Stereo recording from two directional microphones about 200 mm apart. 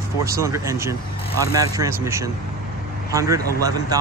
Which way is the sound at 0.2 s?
15° right (ahead or behind).